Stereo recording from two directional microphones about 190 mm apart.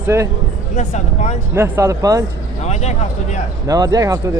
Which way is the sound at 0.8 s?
35° left (ahead or behind).